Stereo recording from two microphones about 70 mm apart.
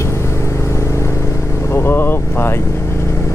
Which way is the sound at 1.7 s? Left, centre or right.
Left.